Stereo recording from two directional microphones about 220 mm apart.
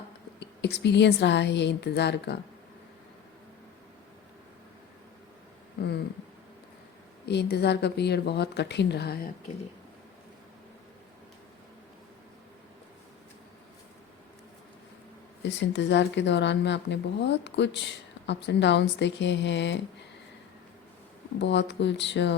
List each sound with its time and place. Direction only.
0.3 s speech: 50° left (ahead or behind)
5.8 s a sound: 45° left (ahead or behind)
7.3 s speech: 50° left (ahead or behind)
15.4 s speech: 55° left (ahead or behind)
21.4 s speech: 50° left (ahead or behind)